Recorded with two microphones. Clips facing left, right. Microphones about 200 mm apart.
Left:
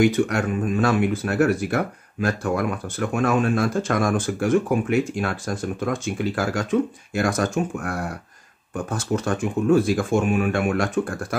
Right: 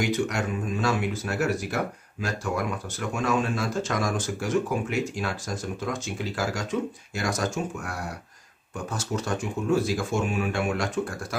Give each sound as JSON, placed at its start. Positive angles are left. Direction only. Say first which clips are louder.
{"t": 0.0, "sound": "speech", "louder": "left 7 dB", "side_deg": 55}